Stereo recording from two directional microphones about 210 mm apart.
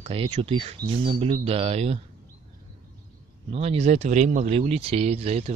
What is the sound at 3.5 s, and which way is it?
Speech, 30° right (ahead or behind).